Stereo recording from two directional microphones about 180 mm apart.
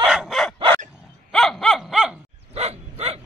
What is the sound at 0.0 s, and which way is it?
Chicken, centre (ahead or behind).